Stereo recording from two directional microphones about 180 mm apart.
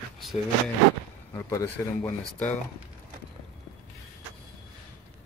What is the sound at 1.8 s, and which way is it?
Speech, 15° left (ahead or behind).